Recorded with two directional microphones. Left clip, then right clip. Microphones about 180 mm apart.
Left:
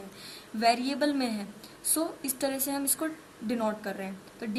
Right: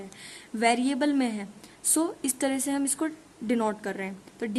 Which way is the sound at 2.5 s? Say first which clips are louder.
Right 3 dB; 40° right (ahead or behind).